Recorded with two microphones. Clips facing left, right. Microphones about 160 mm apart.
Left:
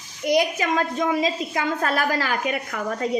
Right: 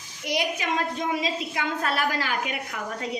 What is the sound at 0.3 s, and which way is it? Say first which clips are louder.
A woman's voice: left 6 dB; 45° left (ahead or behind).